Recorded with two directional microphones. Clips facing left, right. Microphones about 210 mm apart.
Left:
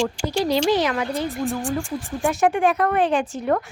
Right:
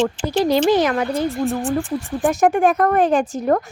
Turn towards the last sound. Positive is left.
turn(degrees=-45)  # may be behind; listen again after turning